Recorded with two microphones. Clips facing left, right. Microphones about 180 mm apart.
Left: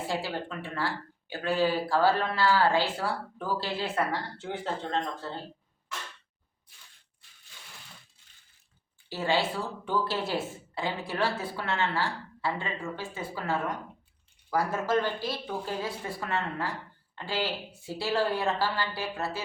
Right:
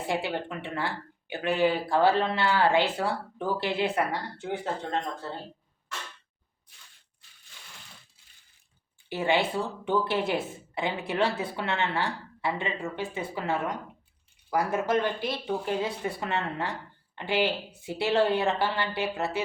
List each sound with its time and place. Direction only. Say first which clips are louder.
0.1 s speech: right 5 dB; 20° right (ahead or behind)
9.0 s speech: right 2 dB; 20° right (ahead or behind)